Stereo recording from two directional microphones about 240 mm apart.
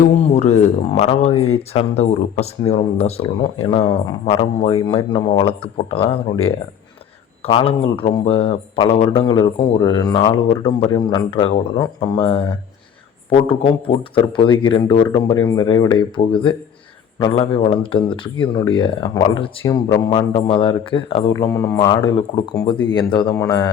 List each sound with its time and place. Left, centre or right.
0.0 s speech: left; by 23.6 s centre